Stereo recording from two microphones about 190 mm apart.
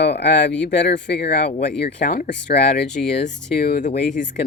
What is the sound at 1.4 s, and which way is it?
Speech, 35° left (ahead or behind).